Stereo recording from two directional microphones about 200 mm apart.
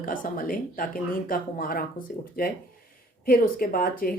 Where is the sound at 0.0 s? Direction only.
45° left (ahead or behind).